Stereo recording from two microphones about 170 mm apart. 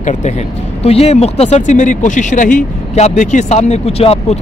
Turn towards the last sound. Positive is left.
turn(degrees=35)  # may be behind; listen again after turning